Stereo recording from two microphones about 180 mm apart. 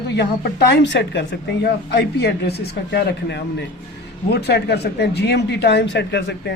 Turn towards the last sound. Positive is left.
turn(degrees=70)  # may be behind; listen again after turning